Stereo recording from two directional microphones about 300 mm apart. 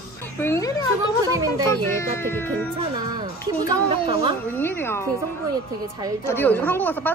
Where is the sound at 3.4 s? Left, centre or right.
Centre.